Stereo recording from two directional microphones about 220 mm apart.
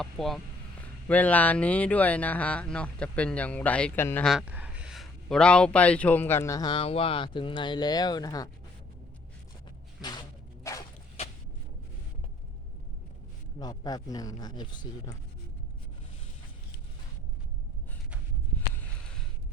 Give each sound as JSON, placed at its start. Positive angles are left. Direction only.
{"t": 0.0, "sound": "speech", "side_deg": 0}
{"t": 10.6, "sound": "a sound", "side_deg": 15}
{"t": 13.6, "sound": "speech", "side_deg": 15}